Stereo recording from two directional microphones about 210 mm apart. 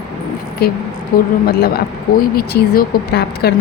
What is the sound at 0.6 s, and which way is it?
Speech, 50° left (ahead or behind).